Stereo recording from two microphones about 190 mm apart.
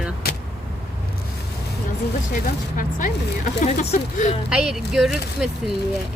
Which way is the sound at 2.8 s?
45° left (ahead or behind).